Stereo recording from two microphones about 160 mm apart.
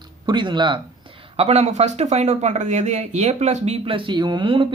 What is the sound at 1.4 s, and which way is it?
Speech, 40° right (ahead or behind).